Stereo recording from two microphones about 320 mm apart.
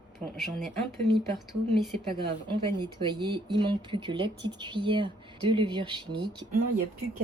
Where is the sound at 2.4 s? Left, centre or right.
Centre.